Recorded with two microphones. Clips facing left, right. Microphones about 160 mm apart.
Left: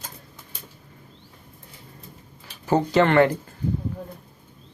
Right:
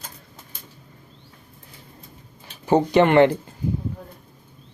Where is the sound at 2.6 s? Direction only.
20° right (ahead or behind).